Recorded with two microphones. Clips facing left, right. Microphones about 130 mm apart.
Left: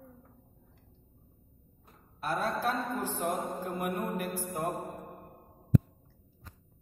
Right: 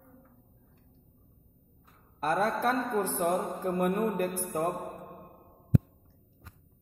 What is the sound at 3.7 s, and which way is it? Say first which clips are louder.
Mantra: right 8 dB; 45° right (ahead or behind).